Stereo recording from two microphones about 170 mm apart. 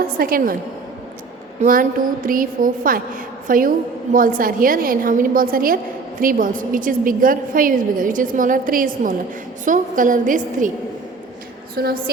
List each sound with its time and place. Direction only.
0.2 s a woman's voice: 60° right (ahead or behind)
1.6 s a woman's voice: 55° right (ahead or behind)
11.8 s a woman's voice: 65° right (ahead or behind)